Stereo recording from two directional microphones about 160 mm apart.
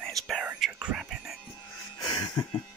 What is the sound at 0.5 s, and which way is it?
Speech, 10° right (ahead or behind).